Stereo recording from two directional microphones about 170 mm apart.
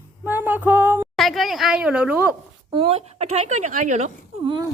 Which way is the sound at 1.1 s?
Centre (ahead or behind).